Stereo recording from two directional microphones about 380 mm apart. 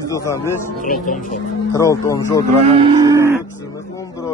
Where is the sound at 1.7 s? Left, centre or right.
Centre.